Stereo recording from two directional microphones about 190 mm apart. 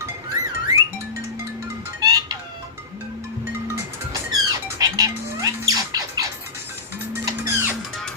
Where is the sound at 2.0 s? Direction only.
20° right (ahead or behind).